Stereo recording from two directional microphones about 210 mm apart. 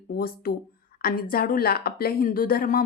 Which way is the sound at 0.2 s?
45° left (ahead or behind).